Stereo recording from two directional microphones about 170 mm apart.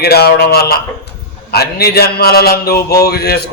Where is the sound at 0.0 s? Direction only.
70° left (ahead or behind).